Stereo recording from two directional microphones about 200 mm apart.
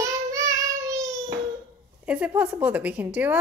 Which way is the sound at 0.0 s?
15° right (ahead or behind).